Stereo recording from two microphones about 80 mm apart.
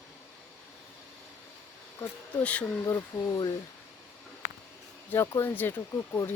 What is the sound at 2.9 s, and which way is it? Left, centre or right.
Speech, left.